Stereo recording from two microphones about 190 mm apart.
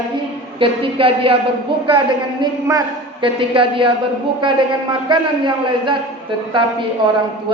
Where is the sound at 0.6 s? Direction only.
30° right (ahead or behind).